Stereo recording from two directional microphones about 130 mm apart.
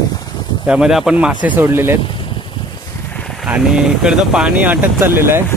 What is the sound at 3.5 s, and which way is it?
Speech, 5° right (ahead or behind).